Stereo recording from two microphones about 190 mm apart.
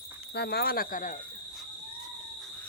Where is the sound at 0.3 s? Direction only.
60° left (ahead or behind).